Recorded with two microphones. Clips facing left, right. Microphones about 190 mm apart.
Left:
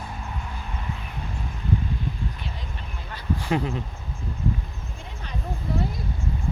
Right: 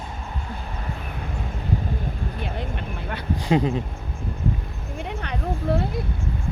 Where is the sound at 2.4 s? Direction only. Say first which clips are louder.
Right 8 dB; 60° right (ahead or behind).